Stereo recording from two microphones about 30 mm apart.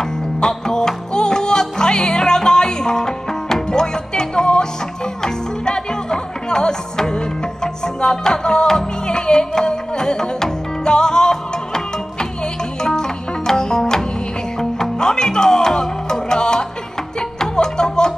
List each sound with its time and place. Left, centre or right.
0.4 s music: left